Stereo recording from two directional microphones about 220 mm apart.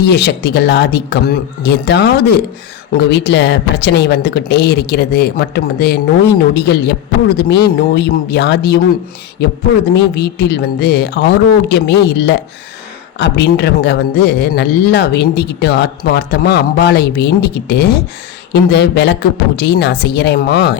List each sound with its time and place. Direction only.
0.0 s a woman's voice: 50° left (ahead or behind)
9.9 s a woman's voice: 50° left (ahead or behind)